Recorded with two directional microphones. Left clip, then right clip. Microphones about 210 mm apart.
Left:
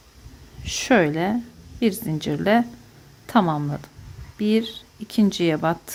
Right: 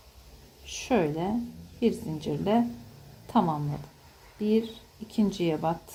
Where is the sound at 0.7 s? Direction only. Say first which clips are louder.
Left 8 dB; 30° left (ahead or behind).